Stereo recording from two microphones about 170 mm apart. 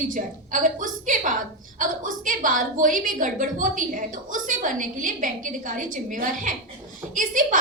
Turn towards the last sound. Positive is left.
turn(degrees=-50)  # may be behind; listen again after turning